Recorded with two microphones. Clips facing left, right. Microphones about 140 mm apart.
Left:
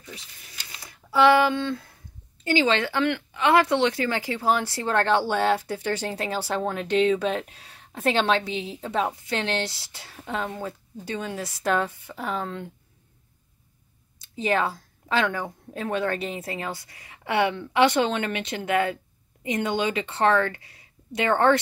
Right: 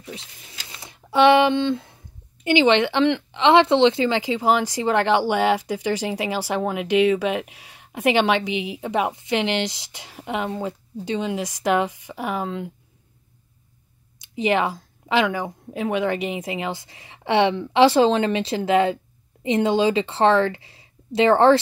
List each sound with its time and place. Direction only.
0.7 s speech: 20° right (ahead or behind)
14.2 s speech: 15° right (ahead or behind)